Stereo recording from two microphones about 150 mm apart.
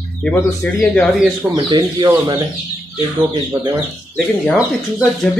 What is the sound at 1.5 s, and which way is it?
Speech, 30° right (ahead or behind).